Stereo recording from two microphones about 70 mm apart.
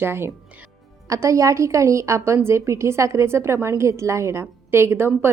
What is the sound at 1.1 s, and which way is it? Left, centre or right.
A woman's voice, right.